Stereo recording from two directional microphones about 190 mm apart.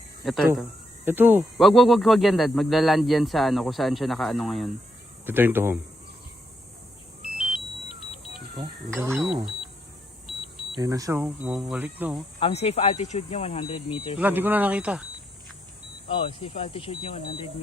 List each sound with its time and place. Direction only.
1.0 s speech: 10° right (ahead or behind)
5.2 s speech: 10° right (ahead or behind)
7.3 s vehicle: centre (ahead or behind)
9.1 s speech: centre (ahead or behind)
10.8 s speech: 15° right (ahead or behind)
12.4 s speech: 30° left (ahead or behind)
14.2 s speech: 10° right (ahead or behind)
16.0 s speech: 30° left (ahead or behind)